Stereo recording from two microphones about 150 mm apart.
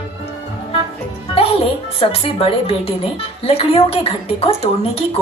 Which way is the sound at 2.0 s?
40° left (ahead or behind).